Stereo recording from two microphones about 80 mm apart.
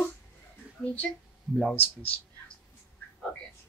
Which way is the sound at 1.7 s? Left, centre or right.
Left.